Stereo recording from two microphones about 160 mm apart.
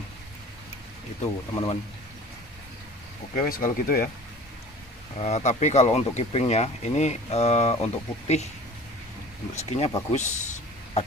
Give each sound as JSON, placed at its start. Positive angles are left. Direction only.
{"t": 1.5, "sound": "speech", "side_deg": 35}
{"t": 3.3, "sound": "speech", "side_deg": 60}
{"t": 5.2, "sound": "speech", "side_deg": 45}
{"t": 9.7, "sound": "speech", "side_deg": 45}